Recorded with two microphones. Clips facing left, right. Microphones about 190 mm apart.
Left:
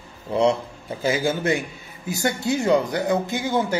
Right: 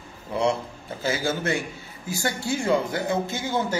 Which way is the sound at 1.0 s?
15° left (ahead or behind).